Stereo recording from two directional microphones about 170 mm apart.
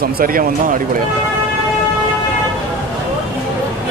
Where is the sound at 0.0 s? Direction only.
55° right (ahead or behind).